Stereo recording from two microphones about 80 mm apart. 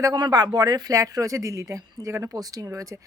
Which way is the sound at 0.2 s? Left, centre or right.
Right.